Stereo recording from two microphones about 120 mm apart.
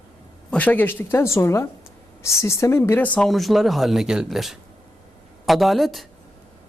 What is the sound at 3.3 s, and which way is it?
Speech, centre (ahead or behind).